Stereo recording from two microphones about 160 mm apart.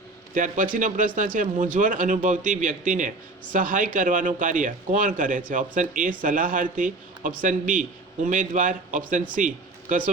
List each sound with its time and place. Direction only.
0.3 s speech: 55° right (ahead or behind)